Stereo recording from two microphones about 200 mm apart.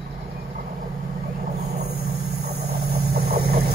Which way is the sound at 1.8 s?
55° right (ahead or behind).